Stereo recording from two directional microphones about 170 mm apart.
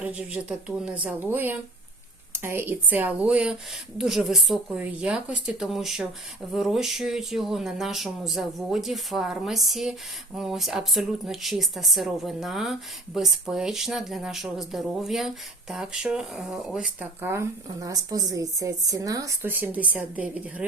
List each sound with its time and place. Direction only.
0.0 s speech: 10° right (ahead or behind)